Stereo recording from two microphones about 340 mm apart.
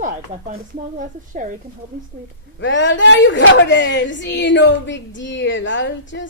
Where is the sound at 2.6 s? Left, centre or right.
Left.